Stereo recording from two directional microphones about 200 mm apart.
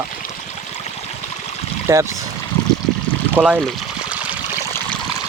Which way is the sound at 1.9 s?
15° right (ahead or behind).